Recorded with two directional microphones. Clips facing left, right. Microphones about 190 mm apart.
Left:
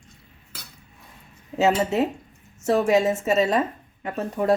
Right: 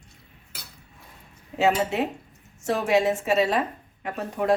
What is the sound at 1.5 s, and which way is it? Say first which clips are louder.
Speech: left 2 dB; 40° left (ahead or behind).